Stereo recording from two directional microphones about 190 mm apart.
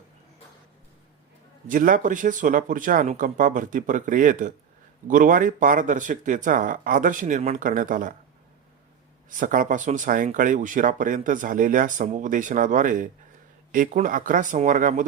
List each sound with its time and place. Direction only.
1.6 s speech: 45° right (ahead or behind)
9.4 s speech: 45° right (ahead or behind)